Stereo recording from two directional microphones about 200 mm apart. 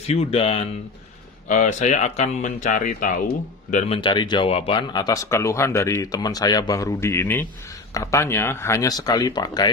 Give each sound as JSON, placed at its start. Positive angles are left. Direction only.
{"t": 0.0, "sound": "speech", "side_deg": 30}